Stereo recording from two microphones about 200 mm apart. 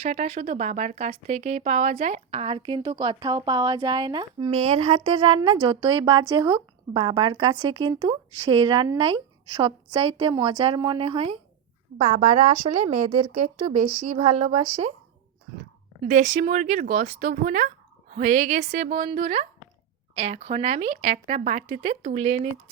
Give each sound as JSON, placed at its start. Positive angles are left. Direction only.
{"t": 0.0, "sound": "speech", "side_deg": -30}
{"t": 4.6, "sound": "speech", "side_deg": -35}
{"t": 16.0, "sound": "speech", "side_deg": -35}